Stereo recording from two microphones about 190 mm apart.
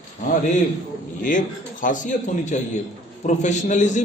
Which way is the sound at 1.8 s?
40° left (ahead or behind).